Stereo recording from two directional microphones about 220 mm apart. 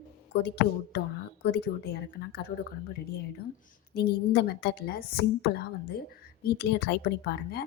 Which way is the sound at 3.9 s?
50° left (ahead or behind).